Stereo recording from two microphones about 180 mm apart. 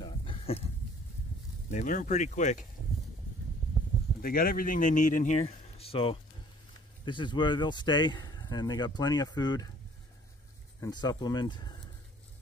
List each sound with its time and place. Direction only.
0.0 s a sound: 30° left (ahead or behind)
1.7 s speech: 45° left (ahead or behind)
4.2 s speech: 55° left (ahead or behind); by 9.7 s 25° left (ahead or behind)
10.8 s speech: 20° left (ahead or behind)